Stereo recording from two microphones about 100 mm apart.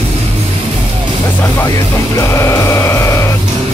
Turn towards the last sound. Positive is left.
turn(degrees=25)  # may be behind; listen again after turning